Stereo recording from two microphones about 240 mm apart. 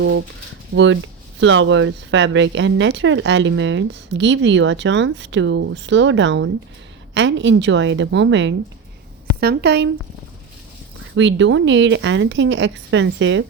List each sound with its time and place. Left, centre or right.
0.0 s speech: right
11.1 s speech: right